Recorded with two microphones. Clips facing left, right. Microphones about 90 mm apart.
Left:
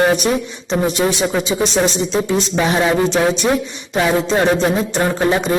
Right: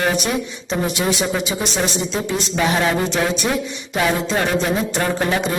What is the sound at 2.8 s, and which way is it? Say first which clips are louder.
Speech: left 4 dB; 20° left (ahead or behind).